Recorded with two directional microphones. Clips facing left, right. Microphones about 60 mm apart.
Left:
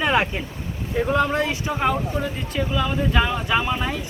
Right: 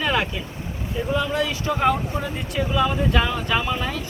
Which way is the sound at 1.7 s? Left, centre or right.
Centre.